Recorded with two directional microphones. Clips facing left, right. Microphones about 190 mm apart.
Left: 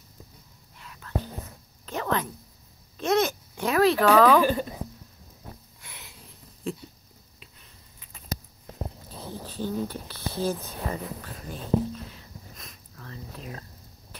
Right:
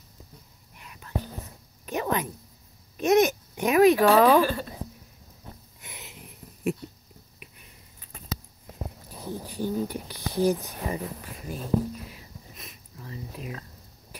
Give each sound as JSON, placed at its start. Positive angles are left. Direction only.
{"t": 0.7, "sound": "whispering", "side_deg": -15}
{"t": 1.9, "sound": "a sound", "side_deg": -15}
{"t": 3.0, "sound": "speech", "side_deg": -15}
{"t": 4.4, "sound": "a woman's voice", "side_deg": 15}
{"t": 5.8, "sound": "wheeze", "side_deg": -20}
{"t": 9.1, "sound": "speech", "side_deg": -15}
{"t": 12.1, "sound": "a sound", "side_deg": -5}